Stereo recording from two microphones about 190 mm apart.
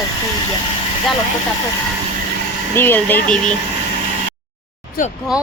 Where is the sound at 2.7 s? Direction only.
10° left (ahead or behind).